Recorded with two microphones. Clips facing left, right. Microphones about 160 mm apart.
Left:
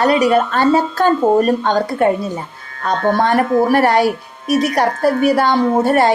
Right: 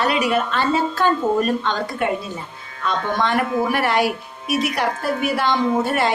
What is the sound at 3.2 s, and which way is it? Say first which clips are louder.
A woman's voice: left 4 dB; 40° left (ahead or behind).